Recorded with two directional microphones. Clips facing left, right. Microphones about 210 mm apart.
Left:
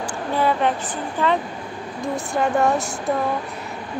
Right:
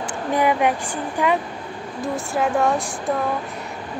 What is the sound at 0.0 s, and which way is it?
Speech, 15° right (ahead or behind).